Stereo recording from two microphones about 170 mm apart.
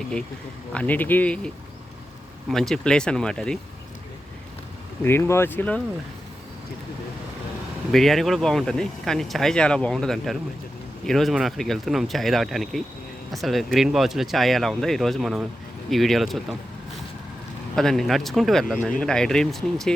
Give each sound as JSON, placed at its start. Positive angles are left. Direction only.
{"t": 0.7, "sound": "speech", "side_deg": 10}
{"t": 2.5, "sound": "speech", "side_deg": 0}
{"t": 5.0, "sound": "speech", "side_deg": 15}
{"t": 7.9, "sound": "speech", "side_deg": 0}
{"t": 17.7, "sound": "speech", "side_deg": 0}